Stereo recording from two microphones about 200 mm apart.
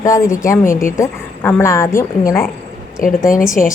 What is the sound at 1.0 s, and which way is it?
A woman's voice, 10° left (ahead or behind).